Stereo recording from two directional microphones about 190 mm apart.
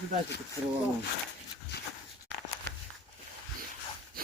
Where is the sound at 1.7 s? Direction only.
60° left (ahead or behind).